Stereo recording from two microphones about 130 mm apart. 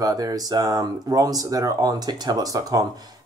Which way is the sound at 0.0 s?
30° right (ahead or behind).